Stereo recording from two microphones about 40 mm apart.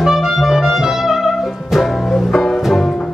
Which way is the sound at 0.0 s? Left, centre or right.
Centre.